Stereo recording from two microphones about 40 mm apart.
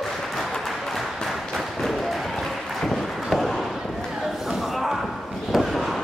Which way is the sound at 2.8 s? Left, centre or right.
Centre.